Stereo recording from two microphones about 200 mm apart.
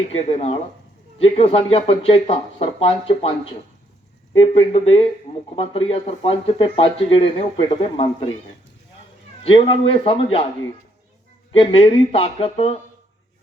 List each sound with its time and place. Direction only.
0.2 s speech: 30° left (ahead or behind)
4.4 s speech: 25° left (ahead or behind)
9.4 s speech: 25° left (ahead or behind)
11.5 s speech: 25° left (ahead or behind)